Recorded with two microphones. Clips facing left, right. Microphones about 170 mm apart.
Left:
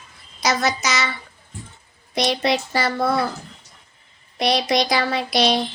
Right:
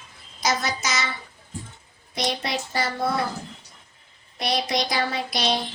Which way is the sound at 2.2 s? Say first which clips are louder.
Left 7 dB; 80° left.